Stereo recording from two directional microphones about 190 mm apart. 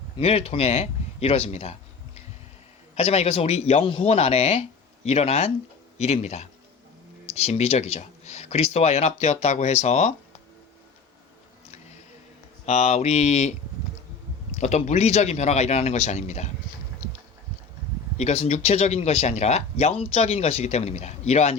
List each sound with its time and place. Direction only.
0.2 s speech: 30° left (ahead or behind)
2.9 s speech: 30° left (ahead or behind)
12.6 s speech: 35° left (ahead or behind)
14.5 s speech: 35° left (ahead or behind)
18.2 s speech: 35° left (ahead or behind)